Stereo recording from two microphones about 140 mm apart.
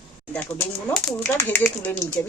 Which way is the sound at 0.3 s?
15° left (ahead or behind).